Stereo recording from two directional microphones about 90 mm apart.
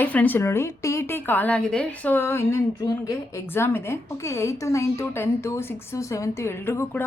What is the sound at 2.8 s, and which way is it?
Speech, 45° left (ahead or behind).